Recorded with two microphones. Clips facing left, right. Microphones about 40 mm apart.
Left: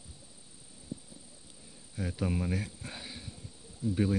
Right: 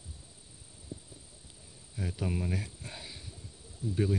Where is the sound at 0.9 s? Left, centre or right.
Right.